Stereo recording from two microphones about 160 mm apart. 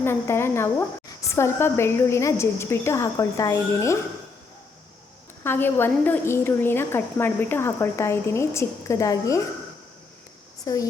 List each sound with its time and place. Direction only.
0.0 s a woman's voice: 15° left (ahead or behind)
5.4 s a woman's voice: 15° left (ahead or behind)
10.7 s speech: 20° left (ahead or behind)